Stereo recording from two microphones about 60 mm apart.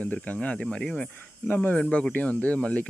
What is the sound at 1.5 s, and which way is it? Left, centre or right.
Speech, left.